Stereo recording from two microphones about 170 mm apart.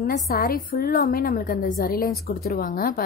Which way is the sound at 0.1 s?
60° left (ahead or behind).